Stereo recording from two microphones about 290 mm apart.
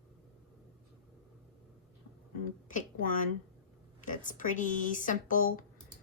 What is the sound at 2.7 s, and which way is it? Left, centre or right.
A woman's voice, left.